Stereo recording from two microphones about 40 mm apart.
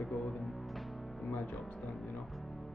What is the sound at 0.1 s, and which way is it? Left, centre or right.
Music, centre.